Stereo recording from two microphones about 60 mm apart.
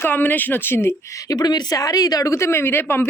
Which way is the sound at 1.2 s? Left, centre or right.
Left.